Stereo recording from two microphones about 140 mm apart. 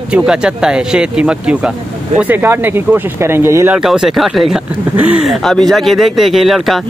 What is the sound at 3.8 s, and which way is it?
Speech, 5° right (ahead or behind).